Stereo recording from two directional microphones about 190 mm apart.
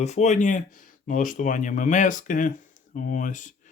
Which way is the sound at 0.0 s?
35° left (ahead or behind).